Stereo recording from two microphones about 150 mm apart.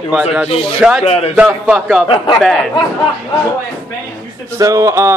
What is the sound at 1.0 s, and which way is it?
Speech, 45° left (ahead or behind).